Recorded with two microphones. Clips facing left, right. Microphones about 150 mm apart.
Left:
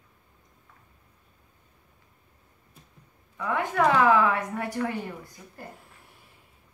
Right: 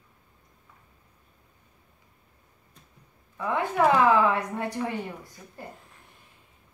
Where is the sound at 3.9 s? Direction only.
25° right (ahead or behind).